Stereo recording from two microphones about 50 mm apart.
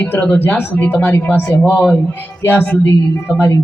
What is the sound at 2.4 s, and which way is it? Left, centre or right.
Speech, left.